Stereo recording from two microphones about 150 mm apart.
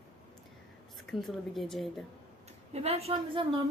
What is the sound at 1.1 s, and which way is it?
Speech, centre (ahead or behind).